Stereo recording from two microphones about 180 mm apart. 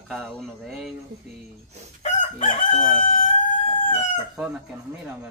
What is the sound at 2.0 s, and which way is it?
Chicken, 40° left (ahead or behind).